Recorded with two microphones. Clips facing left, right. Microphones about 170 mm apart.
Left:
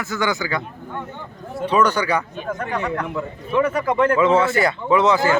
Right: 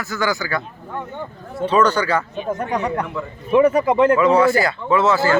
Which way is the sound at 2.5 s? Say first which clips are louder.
Right 3 dB; 20° right (ahead or behind).